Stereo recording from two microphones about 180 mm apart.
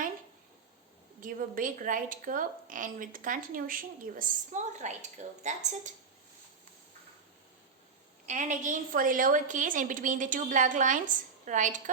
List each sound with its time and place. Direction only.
1.2 s speech: 50° right (ahead or behind)
8.3 s speech: 40° right (ahead or behind)